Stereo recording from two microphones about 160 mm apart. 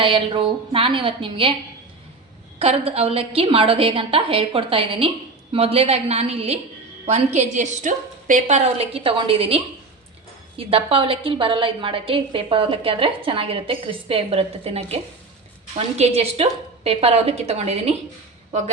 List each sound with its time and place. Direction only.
0.0 s a woman's voice: 30° right (ahead or behind)
2.6 s a woman's voice: 40° right (ahead or behind)
10.6 s a woman's voice: 35° right (ahead or behind)